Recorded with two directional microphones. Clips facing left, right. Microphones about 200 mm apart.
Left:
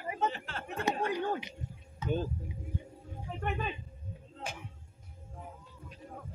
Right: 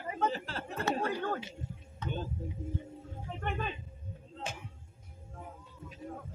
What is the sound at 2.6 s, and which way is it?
Music, 25° right (ahead or behind).